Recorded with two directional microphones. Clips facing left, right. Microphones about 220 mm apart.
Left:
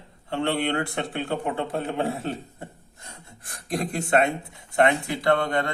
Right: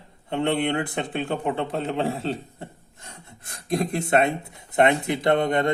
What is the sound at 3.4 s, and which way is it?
Speech, 25° right (ahead or behind).